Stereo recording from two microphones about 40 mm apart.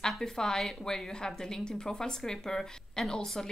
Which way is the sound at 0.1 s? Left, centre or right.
Centre.